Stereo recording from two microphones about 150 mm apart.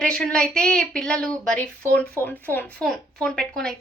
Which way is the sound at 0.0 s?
5° left (ahead or behind).